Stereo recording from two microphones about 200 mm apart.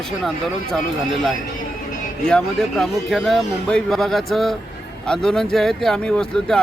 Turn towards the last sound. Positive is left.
turn(degrees=5)  # may be behind; listen again after turning